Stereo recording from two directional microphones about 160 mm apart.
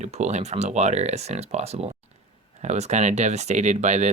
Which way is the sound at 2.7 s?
45° right (ahead or behind).